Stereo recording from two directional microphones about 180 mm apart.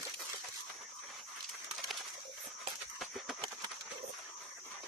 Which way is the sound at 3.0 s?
Centre (ahead or behind).